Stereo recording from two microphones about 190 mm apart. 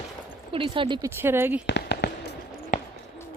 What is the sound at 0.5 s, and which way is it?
Speech, 25° right (ahead or behind).